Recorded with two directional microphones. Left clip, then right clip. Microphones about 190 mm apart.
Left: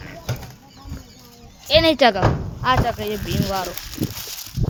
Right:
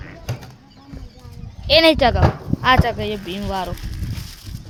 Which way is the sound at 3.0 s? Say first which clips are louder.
Even; 25° right (ahead or behind).